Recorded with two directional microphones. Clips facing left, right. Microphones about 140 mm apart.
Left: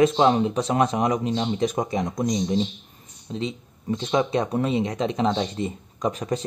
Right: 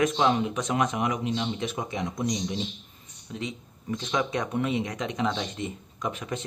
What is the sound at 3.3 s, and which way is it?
Speech, 30° left (ahead or behind).